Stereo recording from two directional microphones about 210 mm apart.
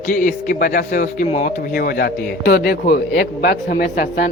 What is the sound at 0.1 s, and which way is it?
A man's voice, 40° left (ahead or behind).